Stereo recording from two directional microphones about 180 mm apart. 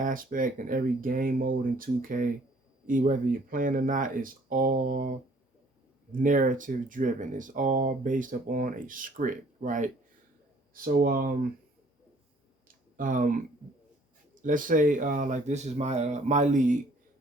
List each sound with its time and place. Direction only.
0.0 s speech: 50° right (ahead or behind)
12.6 s a sound: 50° right (ahead or behind)
14.4 s speech: 50° right (ahead or behind)